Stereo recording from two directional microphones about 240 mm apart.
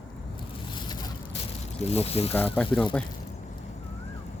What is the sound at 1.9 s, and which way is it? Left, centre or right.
Speech, left.